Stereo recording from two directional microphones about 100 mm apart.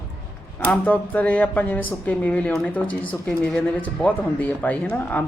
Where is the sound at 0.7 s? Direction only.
15° left (ahead or behind).